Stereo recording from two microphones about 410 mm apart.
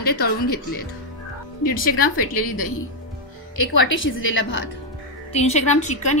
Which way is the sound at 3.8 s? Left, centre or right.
Left.